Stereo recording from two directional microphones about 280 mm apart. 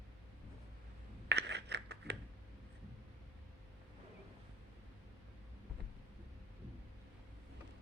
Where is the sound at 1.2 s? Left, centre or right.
Right.